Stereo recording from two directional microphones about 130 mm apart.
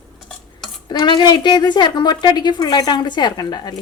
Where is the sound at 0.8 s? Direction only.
35° left (ahead or behind).